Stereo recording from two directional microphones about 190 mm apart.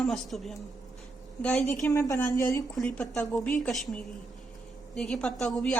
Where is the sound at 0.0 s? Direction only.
Centre (ahead or behind).